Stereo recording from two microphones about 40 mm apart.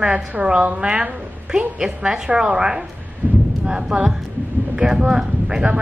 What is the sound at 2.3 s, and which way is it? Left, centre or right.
Speech, right.